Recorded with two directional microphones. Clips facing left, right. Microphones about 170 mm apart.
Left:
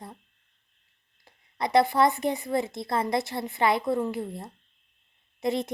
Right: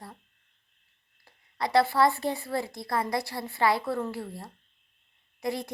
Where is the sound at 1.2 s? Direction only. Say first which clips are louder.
Left 1 dB; 20° left (ahead or behind).